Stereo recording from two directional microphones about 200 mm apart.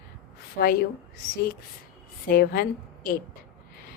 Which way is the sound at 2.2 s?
50° left (ahead or behind).